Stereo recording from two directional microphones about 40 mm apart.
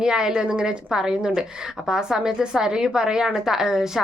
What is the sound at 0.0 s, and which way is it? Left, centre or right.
A woman's voice, centre.